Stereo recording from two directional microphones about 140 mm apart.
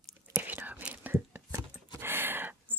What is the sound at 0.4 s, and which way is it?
Whispering, 10° right (ahead or behind).